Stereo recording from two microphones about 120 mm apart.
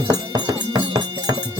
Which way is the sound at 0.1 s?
35° right (ahead or behind).